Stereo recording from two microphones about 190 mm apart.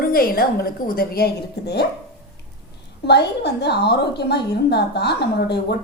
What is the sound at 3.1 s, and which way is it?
A woman's voice, 60° left (ahead or behind).